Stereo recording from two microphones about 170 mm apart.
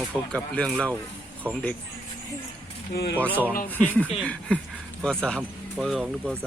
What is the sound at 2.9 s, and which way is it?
Speech, 75° left (ahead or behind).